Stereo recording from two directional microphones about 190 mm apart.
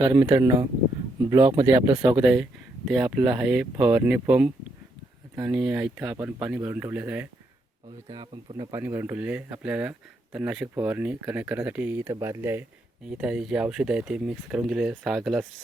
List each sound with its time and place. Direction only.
0.0 s speech: 20° right (ahead or behind)
2.2 s speech: 5° right (ahead or behind)
7.9 s speech: 25° right (ahead or behind); by 15.4 s centre (ahead or behind)